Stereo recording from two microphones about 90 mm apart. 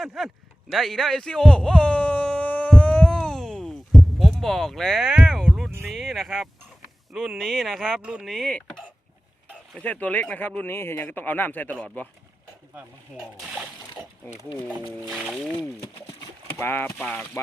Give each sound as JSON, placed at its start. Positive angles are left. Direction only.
{"t": 0.0, "sound": "a sound", "side_deg": 0}
{"t": 7.1, "sound": "speech", "side_deg": -5}
{"t": 8.0, "sound": "speech", "side_deg": -10}
{"t": 8.3, "sound": "speech", "side_deg": 5}
{"t": 9.8, "sound": "speech", "side_deg": 15}
{"t": 15.1, "sound": "speech", "side_deg": -5}
{"t": 16.6, "sound": "speech", "side_deg": 25}